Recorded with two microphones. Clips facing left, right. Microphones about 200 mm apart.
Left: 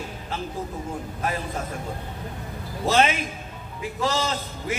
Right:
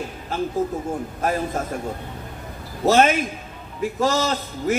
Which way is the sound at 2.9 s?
45° right (ahead or behind).